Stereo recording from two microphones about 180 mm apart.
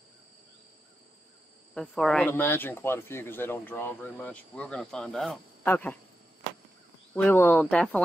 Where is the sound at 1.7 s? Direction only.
5° left (ahead or behind).